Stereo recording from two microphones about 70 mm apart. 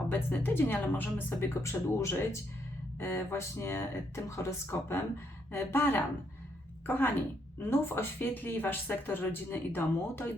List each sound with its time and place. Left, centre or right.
0.1 s speech: left
1.6 s speech: left
3.0 s speech: left